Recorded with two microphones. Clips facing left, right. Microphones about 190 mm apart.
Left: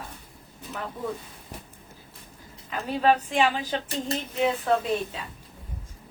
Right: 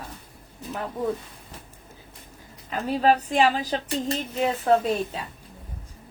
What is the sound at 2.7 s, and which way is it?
A woman's voice, 35° right (ahead or behind).